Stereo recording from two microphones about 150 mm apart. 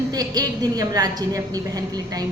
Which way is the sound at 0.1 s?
25° right (ahead or behind).